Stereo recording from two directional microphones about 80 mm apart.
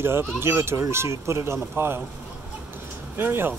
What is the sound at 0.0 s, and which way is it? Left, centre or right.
Speech, right.